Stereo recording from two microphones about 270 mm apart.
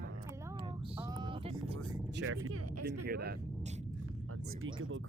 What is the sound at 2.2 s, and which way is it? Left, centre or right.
Speech, right.